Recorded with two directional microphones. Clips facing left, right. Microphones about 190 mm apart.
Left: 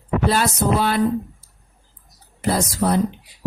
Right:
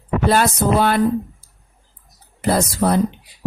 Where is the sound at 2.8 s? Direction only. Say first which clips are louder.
Right 1 dB; 55° right (ahead or behind).